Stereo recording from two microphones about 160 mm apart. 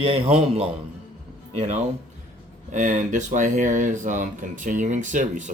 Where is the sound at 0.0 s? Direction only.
35° right (ahead or behind).